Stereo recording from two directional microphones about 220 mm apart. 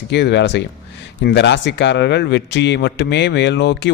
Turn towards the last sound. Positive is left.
turn(degrees=50)  # may be behind; listen again after turning